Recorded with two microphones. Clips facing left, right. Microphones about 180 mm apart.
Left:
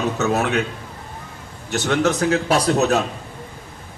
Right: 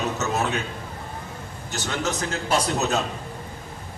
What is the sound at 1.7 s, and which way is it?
A man's voice, 65° left (ahead or behind).